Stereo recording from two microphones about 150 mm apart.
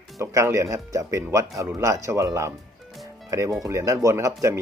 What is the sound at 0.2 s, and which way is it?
Speech, 20° right (ahead or behind).